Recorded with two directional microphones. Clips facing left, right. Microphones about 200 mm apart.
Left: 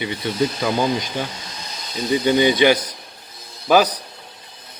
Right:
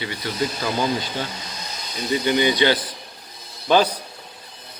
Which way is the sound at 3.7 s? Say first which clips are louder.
Left 2 dB; 10° left (ahead or behind).